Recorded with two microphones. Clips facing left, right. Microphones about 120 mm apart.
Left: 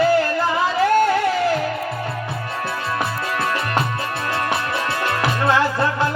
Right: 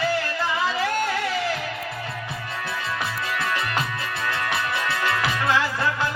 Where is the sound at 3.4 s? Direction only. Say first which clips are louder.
Left 5 dB; 55° left (ahead or behind).